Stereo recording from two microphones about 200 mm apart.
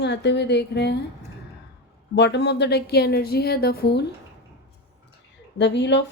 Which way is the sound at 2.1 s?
60° left (ahead or behind).